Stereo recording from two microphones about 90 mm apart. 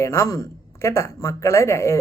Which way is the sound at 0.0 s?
35° left (ahead or behind).